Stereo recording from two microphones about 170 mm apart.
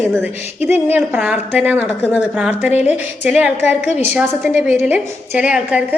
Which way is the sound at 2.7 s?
40° left (ahead or behind).